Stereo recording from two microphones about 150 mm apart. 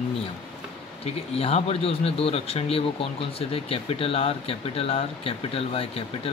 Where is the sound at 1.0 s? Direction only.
45° left (ahead or behind).